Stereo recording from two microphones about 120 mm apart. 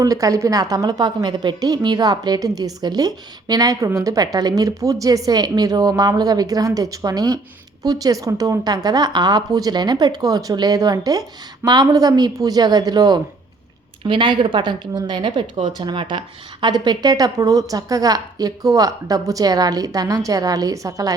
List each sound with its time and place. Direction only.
0.0 s a woman's voice: 30° right (ahead or behind)